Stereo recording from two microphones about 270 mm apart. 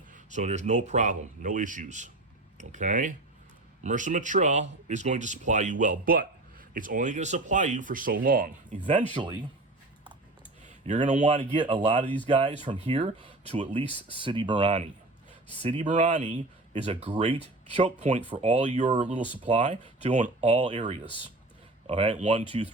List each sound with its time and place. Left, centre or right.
0.1 s speech: right
9.2 s speech: centre
10.8 s speech: right